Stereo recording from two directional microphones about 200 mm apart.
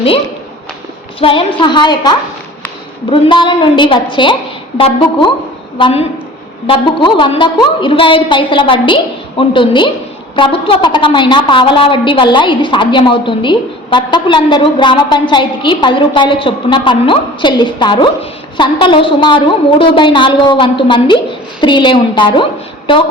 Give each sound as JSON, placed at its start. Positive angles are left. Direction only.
{"t": 1.2, "sound": "a woman's voice", "side_deg": 25}